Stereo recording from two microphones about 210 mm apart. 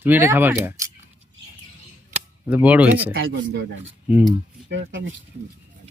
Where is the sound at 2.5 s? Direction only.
5° right (ahead or behind).